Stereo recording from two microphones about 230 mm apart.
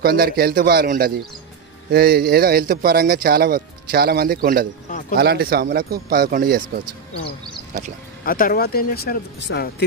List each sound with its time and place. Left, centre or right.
0.0 s speech: right
8.3 s speech: left